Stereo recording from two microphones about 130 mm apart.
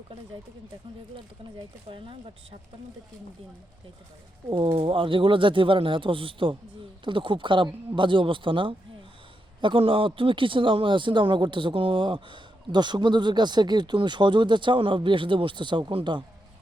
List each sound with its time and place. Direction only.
1.9 s speech: 45° right (ahead or behind)
4.4 s speech: 40° right (ahead or behind)